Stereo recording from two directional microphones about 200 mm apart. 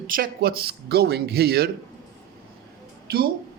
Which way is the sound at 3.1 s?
50° right (ahead or behind).